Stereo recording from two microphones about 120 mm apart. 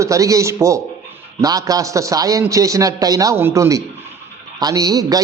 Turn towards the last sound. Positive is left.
turn(degrees=-30)  # may be behind; listen again after turning